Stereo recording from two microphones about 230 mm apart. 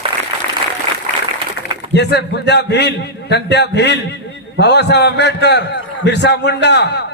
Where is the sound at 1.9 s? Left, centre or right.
Left.